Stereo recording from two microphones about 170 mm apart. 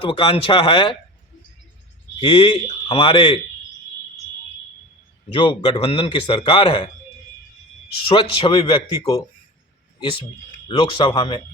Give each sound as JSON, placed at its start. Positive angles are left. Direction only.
{"t": 0.0, "sound": "speech", "side_deg": 30}
{"t": 2.1, "sound": "speech", "side_deg": 30}
{"t": 5.3, "sound": "a man's voice", "side_deg": 30}
{"t": 8.0, "sound": "a man's voice", "side_deg": 30}
{"t": 10.7, "sound": "a man's voice", "side_deg": 30}